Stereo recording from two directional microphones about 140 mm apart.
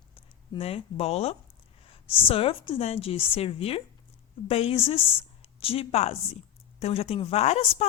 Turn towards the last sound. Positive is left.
turn(degrees=45)  # may be behind; listen again after turning